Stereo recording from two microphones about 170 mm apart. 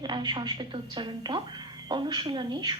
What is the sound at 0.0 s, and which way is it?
Speech, 25° right (ahead or behind).